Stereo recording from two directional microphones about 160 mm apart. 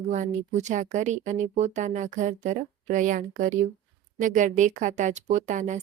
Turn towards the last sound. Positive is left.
turn(degrees=-50)  # may be behind; listen again after turning